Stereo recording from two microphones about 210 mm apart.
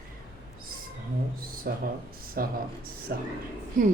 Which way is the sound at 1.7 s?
45° right (ahead or behind).